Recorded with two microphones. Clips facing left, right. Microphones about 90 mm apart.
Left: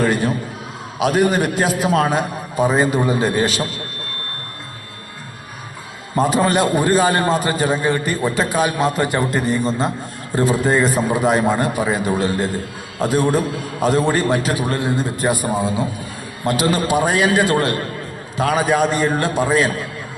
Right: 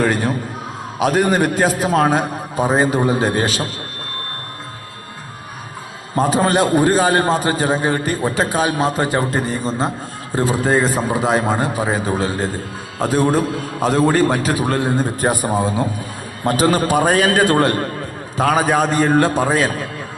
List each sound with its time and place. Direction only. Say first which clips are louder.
0.0 s a man's voice: even; 45° right (ahead or behind)
6.3 s a man's voice: right 2 dB; 35° right (ahead or behind)